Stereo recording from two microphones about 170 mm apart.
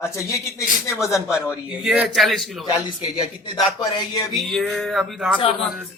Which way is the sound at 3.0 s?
20° left (ahead or behind).